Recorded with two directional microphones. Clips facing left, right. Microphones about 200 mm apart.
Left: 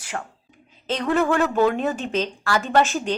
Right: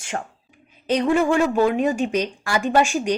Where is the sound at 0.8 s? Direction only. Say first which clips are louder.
Right 3 dB; 15° right (ahead or behind).